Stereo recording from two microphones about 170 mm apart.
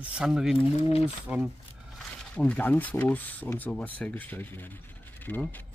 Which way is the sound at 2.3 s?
10° left (ahead or behind).